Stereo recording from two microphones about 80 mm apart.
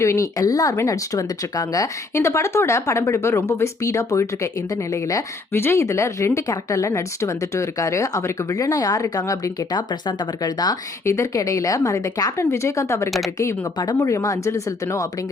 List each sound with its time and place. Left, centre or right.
0.0 s speech: left
5.5 s speech: left
11.0 s speech: left
13.1 s speech: centre
13.9 s speech: left